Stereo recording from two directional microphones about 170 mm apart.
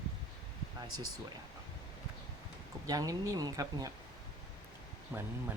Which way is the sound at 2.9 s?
20° right (ahead or behind).